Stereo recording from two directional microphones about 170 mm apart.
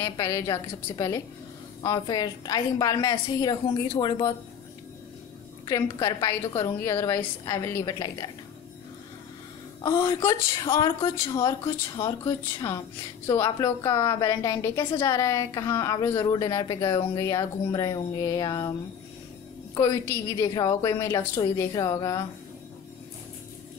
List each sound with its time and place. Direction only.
0.0 s a woman's voice: 20° left (ahead or behind)
5.9 s a woman's voice: 20° left (ahead or behind)
9.8 s a woman's voice: 15° left (ahead or behind)
19.7 s a woman's voice: 20° left (ahead or behind)